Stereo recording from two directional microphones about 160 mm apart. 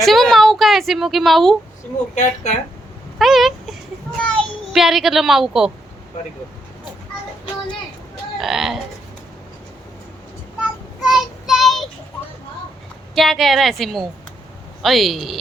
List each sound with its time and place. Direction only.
0.0 s a woman's voice: centre (ahead or behind)
2.1 s speech: 50° left (ahead or behind)
3.2 s dog: centre (ahead or behind)
4.7 s a woman's voice: centre (ahead or behind)
8.4 s a woman's voice: centre (ahead or behind)
11.1 s child singing: centre (ahead or behind)
13.1 s a woman's voice: centre (ahead or behind)